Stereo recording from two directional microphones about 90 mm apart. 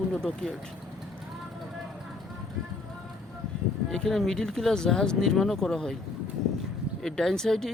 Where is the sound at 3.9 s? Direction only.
5° left (ahead or behind).